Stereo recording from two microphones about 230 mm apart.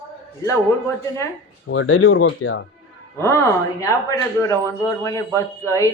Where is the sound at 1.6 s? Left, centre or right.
Left.